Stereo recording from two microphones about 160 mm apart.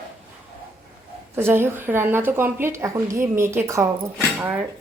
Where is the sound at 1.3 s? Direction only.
15° right (ahead or behind).